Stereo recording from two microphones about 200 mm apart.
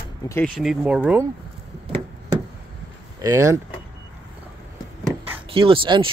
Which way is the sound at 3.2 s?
15° right (ahead or behind).